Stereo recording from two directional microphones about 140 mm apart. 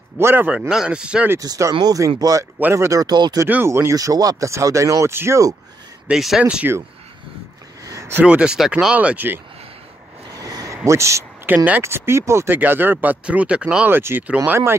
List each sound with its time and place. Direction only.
0.2 s speech: 15° right (ahead or behind)
0.6 s speech: 5° right (ahead or behind)
1.4 s speech: 25° right (ahead or behind)
3.4 s speech: 15° right (ahead or behind)
6.0 s speech: 5° right (ahead or behind)
7.8 s a sound: 20° right (ahead or behind)
8.2 s speech: 10° right (ahead or behind)
10.3 s a sound: 25° right (ahead or behind)
10.9 s speech: 20° right (ahead or behind)